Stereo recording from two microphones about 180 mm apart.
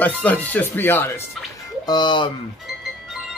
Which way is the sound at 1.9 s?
25° left (ahead or behind).